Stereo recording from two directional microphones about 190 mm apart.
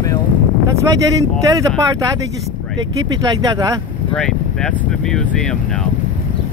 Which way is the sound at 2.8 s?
20° right (ahead or behind).